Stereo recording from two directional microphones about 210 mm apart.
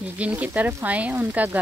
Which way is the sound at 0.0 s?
5° right (ahead or behind).